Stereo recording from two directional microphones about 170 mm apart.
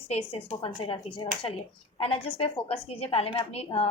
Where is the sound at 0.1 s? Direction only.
35° left (ahead or behind).